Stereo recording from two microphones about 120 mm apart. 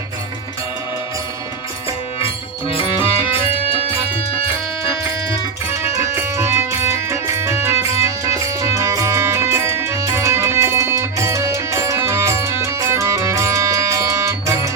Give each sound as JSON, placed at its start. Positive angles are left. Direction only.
{"t": 2.1, "sound": "music", "side_deg": 50}
{"t": 5.6, "sound": "music", "side_deg": -20}